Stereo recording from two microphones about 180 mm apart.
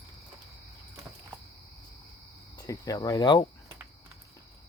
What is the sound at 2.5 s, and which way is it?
Speech, 20° left (ahead or behind).